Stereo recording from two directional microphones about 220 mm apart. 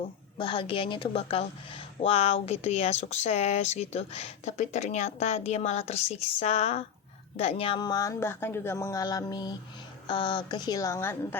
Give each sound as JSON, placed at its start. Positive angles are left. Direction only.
{"t": 0.3, "sound": "speech", "side_deg": 25}